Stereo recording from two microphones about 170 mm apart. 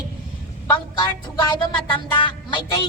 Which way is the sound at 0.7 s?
25° left (ahead or behind).